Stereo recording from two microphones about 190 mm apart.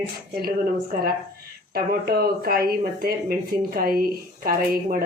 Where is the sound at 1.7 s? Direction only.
55° right (ahead or behind).